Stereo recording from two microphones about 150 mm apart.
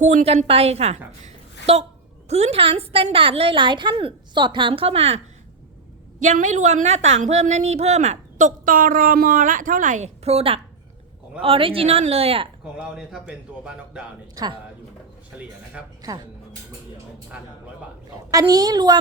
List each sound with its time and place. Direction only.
0.0 s a woman's voice: 50° right (ahead or behind)
6.1 s a woman's voice: 55° right (ahead or behind)
12.7 s a man's voice: 5° right (ahead or behind)
14.4 s a woman's voice: 25° right (ahead or behind)
16.0 s speech: 25° right (ahead or behind)
18.3 s a woman's voice: 25° right (ahead or behind)